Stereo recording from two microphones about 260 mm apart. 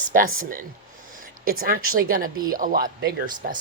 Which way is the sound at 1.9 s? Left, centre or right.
Right.